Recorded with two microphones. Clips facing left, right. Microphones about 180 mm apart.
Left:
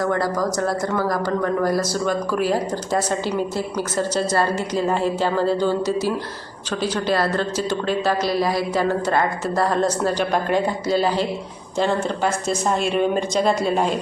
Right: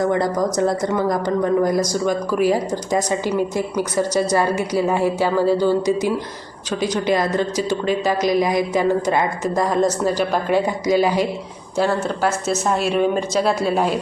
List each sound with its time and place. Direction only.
0.0 s speech: 20° right (ahead or behind); by 14.0 s 5° right (ahead or behind)